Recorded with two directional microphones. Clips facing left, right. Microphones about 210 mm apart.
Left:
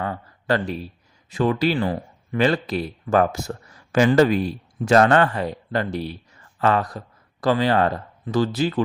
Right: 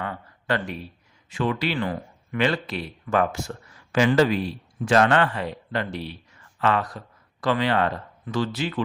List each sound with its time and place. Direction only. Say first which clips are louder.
0.0 s speech: left 4 dB; 40° left (ahead or behind)